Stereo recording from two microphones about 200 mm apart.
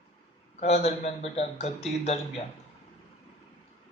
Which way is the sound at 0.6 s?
35° left (ahead or behind).